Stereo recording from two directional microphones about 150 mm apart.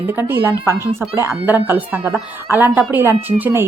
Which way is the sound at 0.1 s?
15° right (ahead or behind).